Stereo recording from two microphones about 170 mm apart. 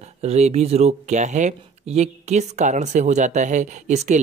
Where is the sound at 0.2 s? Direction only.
40° right (ahead or behind).